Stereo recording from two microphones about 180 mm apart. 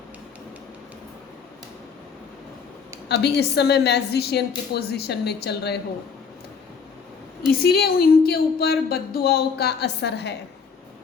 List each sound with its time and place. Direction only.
3.1 s speech: 65° left (ahead or behind)
7.6 s speech: 60° left (ahead or behind)